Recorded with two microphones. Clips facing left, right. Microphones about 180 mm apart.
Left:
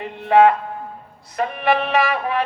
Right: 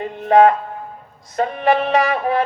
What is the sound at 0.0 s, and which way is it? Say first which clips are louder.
Music: right 2 dB; 35° right (ahead or behind).